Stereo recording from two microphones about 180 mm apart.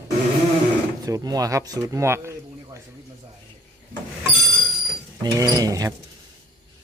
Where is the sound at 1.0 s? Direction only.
20° right (ahead or behind).